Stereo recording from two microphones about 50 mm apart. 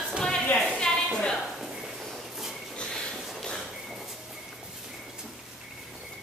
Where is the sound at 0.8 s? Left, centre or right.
Centre.